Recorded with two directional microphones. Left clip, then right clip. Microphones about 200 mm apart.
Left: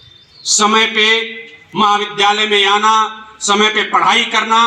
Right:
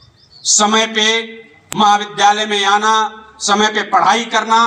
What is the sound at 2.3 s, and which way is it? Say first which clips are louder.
Speech: left 2 dB; 20° right (ahead or behind).